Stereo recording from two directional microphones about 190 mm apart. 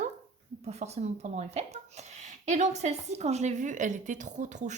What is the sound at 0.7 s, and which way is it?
Speech, 35° right (ahead or behind).